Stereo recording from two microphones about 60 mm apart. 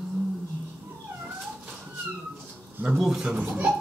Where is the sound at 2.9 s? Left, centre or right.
Centre.